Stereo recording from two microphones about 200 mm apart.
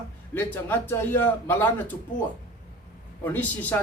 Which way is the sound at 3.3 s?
10° left (ahead or behind).